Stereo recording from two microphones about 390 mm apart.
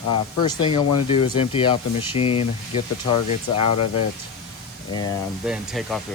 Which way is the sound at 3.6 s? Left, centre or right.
Left.